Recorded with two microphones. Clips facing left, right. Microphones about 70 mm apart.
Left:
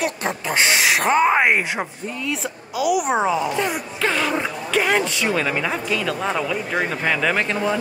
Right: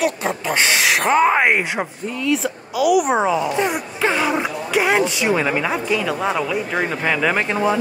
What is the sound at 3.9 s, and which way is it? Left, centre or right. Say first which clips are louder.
Speech: right 2 dB; centre.